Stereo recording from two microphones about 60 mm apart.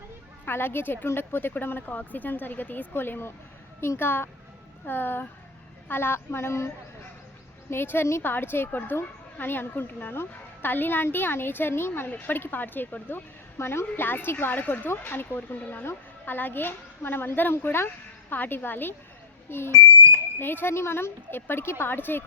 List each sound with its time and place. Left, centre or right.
0.4 s a woman's voice: left
7.7 s a woman's voice: left
15.8 s a woman's voice: left